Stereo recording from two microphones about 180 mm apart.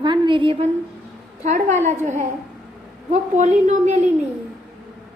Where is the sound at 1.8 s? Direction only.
40° right (ahead or behind).